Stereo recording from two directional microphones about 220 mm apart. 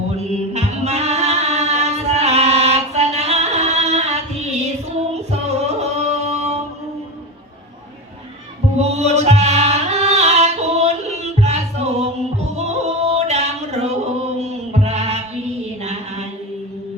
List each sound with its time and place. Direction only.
0.5 s music: 30° right (ahead or behind)
8.8 s music: 30° right (ahead or behind)
12.5 s yodeling: 30° right (ahead or behind)
15.8 s a sound: 30° right (ahead or behind)